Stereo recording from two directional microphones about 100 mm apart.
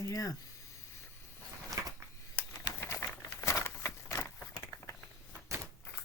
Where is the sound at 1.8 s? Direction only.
30° right (ahead or behind).